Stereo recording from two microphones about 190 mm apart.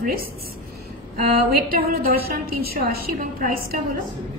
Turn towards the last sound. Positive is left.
turn(degrees=-50)  # may be behind; listen again after turning